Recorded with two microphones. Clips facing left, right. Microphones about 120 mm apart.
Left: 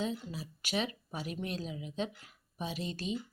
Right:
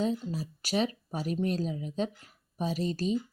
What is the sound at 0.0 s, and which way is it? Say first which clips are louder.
Speech: right 6 dB; 40° right (ahead or behind).